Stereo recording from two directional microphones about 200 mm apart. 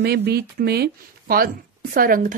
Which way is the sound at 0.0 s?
55° right (ahead or behind).